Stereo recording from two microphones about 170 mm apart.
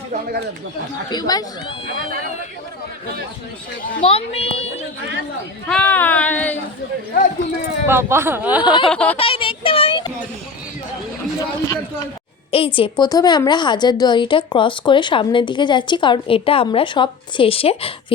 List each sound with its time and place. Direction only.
0.1 s a sound: 65° right (ahead or behind)
1.1 s speech: 25° left (ahead or behind)
4.0 s speech: 35° left (ahead or behind)
5.6 s speech: 5° left (ahead or behind)
7.9 s speech: 15° right (ahead or behind)
8.6 s speech: 25° left (ahead or behind)
8.9 s speech: 5° left (ahead or behind)
9.1 s a sound: 35° left (ahead or behind)
11.3 s speech: 20° left (ahead or behind)
12.5 s speech: 35° left (ahead or behind)